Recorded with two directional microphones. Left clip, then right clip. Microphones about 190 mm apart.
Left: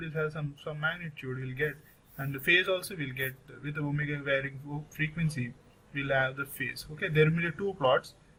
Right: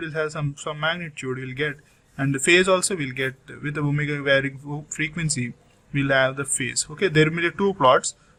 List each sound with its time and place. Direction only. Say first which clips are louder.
0.0 s speech: right 8 dB; 45° right (ahead or behind)